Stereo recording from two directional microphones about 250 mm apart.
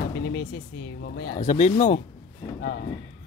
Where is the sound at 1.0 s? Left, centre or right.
Left.